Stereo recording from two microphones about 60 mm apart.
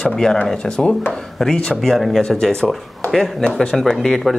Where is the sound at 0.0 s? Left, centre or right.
Centre.